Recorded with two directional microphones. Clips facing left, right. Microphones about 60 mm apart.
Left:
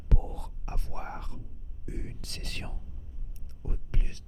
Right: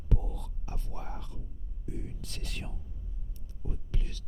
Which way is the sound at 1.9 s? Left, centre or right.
Left.